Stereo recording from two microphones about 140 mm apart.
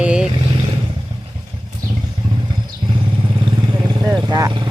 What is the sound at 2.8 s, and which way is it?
Vehicle, 35° right (ahead or behind).